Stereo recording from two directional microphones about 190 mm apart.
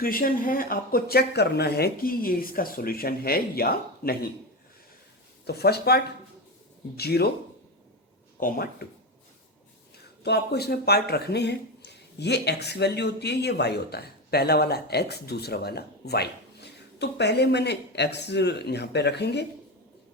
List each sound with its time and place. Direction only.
0.0 s speech: 50° left (ahead or behind)
5.5 s speech: 60° left (ahead or behind)
8.4 s speech: 50° left (ahead or behind)
10.2 s speech: 60° left (ahead or behind)